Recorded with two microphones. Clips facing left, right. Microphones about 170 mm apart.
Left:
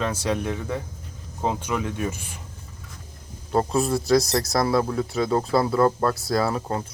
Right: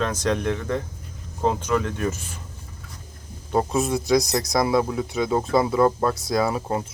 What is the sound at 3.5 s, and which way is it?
Speech, centre (ahead or behind).